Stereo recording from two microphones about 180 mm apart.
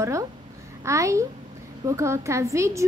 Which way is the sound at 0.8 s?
15° right (ahead or behind).